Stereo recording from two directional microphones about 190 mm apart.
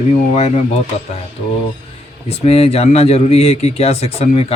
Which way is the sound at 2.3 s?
30° left (ahead or behind).